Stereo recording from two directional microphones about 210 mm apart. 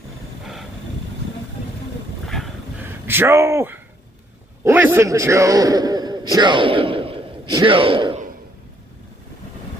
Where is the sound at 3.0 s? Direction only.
10° right (ahead or behind).